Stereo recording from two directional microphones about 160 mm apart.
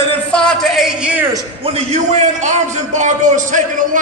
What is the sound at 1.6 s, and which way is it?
A man's voice, 40° right (ahead or behind).